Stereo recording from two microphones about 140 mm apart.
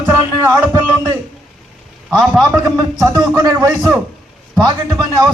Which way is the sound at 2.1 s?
Centre (ahead or behind).